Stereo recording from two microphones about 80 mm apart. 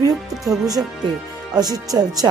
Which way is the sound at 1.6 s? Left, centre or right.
Right.